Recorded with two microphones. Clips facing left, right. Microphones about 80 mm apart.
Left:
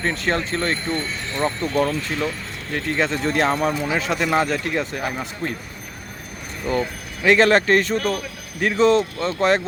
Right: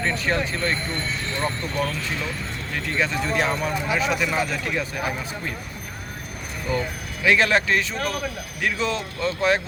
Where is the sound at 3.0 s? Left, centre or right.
Left.